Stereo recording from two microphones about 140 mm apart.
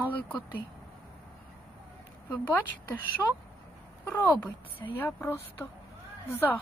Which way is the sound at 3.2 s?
10° left (ahead or behind).